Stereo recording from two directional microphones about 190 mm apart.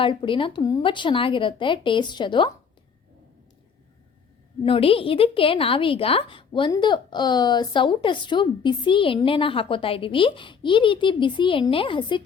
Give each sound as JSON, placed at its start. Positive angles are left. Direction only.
{"t": 0.0, "sound": "a woman's voice", "side_deg": 25}
{"t": 4.6, "sound": "a woman's voice", "side_deg": 30}